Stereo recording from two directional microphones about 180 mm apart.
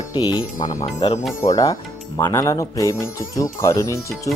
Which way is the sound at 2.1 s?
15° left (ahead or behind).